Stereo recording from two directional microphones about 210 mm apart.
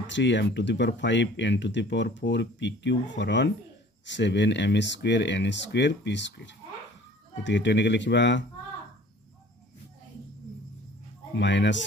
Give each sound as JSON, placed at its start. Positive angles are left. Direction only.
{"t": 0.0, "sound": "speech", "side_deg": 60}
{"t": 11.3, "sound": "speech", "side_deg": 60}